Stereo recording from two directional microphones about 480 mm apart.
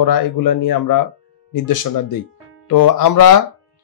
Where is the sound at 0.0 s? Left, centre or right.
Left.